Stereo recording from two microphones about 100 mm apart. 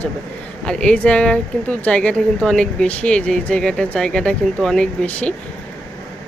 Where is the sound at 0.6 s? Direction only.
10° left (ahead or behind).